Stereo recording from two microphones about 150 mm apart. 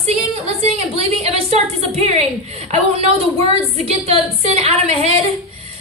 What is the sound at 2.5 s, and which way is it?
A woman's voice, 45° right (ahead or behind).